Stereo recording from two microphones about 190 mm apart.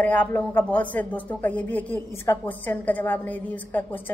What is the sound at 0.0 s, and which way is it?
A woman's voice, 10° left (ahead or behind).